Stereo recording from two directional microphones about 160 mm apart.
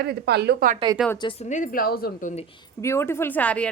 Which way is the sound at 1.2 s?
35° left (ahead or behind).